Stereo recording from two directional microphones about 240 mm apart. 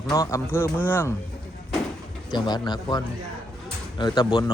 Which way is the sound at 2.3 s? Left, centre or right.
Centre.